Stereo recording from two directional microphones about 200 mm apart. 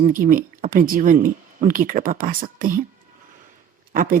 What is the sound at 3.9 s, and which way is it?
Speech, 40° right (ahead or behind).